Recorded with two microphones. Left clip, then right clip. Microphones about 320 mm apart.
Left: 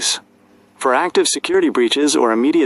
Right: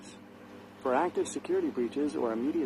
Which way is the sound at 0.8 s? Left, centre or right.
Left.